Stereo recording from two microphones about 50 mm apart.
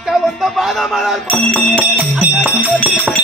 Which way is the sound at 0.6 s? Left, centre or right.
Centre.